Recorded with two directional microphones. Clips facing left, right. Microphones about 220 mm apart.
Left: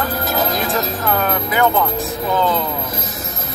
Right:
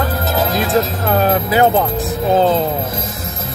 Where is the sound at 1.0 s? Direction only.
30° right (ahead or behind).